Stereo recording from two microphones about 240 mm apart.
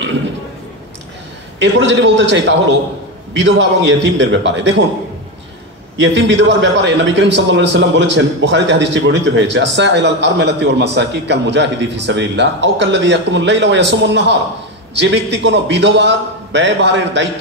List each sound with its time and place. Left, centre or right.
1.6 s a man's voice: right
5.9 s a man's voice: right